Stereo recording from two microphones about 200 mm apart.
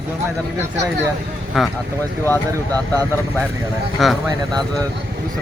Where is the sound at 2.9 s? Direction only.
15° right (ahead or behind).